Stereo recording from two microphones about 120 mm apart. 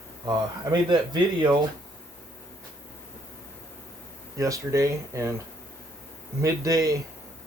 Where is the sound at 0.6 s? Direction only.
35° right (ahead or behind).